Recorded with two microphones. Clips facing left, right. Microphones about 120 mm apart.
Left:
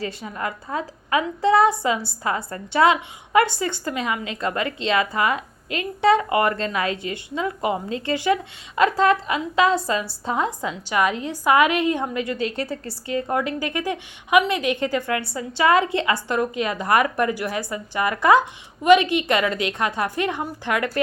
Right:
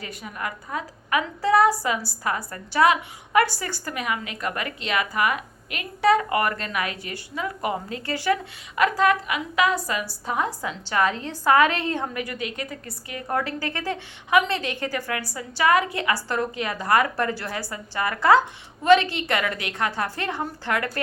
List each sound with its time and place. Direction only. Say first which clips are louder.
0.0 s a woman's voice: left 4 dB; 25° left (ahead or behind)